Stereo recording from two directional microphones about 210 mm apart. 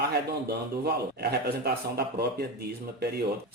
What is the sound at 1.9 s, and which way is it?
Speech, 50° right (ahead or behind).